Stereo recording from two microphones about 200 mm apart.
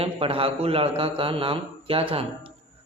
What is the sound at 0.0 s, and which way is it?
A man's voice, 30° right (ahead or behind).